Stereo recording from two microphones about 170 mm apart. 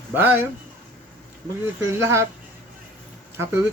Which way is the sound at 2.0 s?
15° right (ahead or behind).